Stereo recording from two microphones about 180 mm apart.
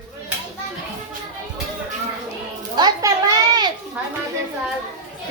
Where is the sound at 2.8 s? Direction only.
20° right (ahead or behind).